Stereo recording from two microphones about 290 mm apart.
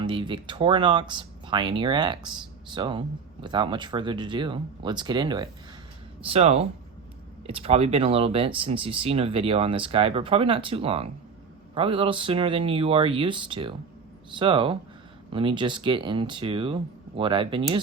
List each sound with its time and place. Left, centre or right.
0.0 s speech: centre